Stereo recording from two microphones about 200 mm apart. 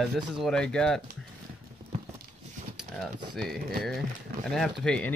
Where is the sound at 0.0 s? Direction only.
Centre (ahead or behind).